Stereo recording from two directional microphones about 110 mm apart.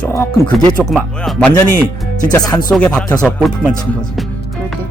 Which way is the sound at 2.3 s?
35° left (ahead or behind).